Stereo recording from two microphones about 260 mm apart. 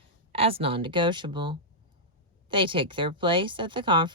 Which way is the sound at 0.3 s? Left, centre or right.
Right.